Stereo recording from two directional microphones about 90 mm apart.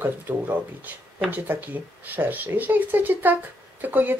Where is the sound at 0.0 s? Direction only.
20° right (ahead or behind).